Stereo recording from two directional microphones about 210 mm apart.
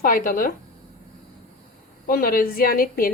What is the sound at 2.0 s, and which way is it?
A woman's voice, 45° left (ahead or behind).